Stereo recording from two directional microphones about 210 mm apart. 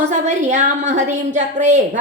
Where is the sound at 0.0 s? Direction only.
35° right (ahead or behind).